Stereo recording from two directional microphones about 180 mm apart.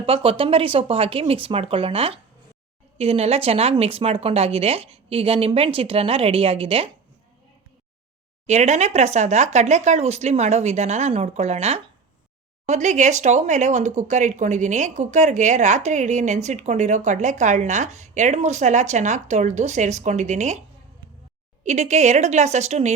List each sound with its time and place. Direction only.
0.0 s speech: 30° right (ahead or behind)
8.4 s speech: 40° right (ahead or behind)
21.6 s speech: 40° right (ahead or behind)